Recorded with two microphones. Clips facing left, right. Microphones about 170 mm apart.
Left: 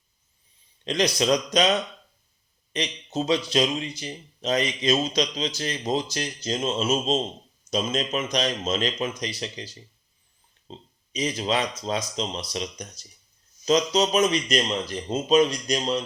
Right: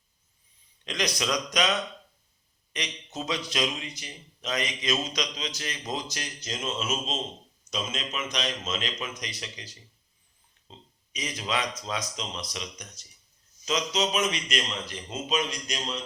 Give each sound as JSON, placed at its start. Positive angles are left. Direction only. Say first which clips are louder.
{"t": 0.9, "sound": "speech", "louder": "left 8 dB", "side_deg": 30}